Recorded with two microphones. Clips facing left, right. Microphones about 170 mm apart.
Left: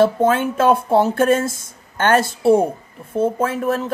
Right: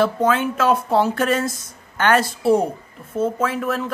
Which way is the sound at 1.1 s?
50° left (ahead or behind).